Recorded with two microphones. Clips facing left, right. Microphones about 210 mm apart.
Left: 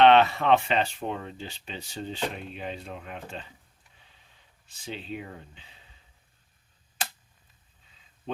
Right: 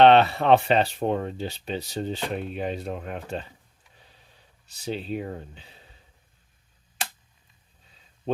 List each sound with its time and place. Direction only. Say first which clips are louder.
0.0 s speech: right 2 dB; 35° right (ahead or behind)
4.6 s speech: right 7 dB; 40° right (ahead or behind)